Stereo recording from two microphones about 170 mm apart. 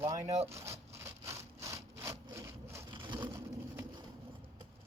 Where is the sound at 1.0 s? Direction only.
15° right (ahead or behind).